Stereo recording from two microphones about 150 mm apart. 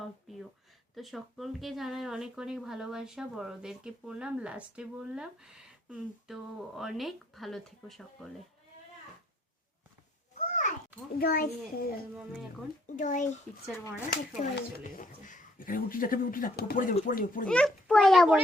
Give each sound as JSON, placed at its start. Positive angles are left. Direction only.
{"t": 0.0, "sound": "a sound", "side_deg": 0}
{"t": 0.9, "sound": "speech", "side_deg": 0}
{"t": 10.3, "sound": "a sound", "side_deg": 55}
{"t": 11.2, "sound": "a child's voice", "side_deg": 90}
{"t": 13.0, "sound": "a child's voice", "side_deg": 60}
{"t": 17.5, "sound": "a child's voice", "side_deg": 5}